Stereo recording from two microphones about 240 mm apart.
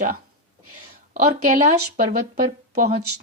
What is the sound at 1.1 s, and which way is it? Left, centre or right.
Speech, right.